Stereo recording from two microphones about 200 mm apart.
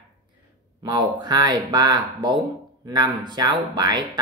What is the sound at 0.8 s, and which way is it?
Speech, 20° right (ahead or behind).